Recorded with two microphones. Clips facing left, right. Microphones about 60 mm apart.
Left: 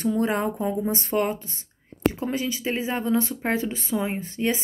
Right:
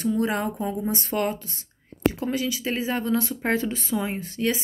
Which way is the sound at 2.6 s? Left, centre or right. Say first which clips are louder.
Even; left.